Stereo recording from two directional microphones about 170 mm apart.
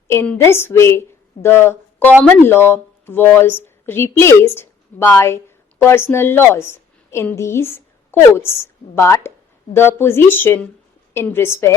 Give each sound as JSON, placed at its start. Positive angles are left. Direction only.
{"t": 0.1, "sound": "a woman's voice", "side_deg": 15}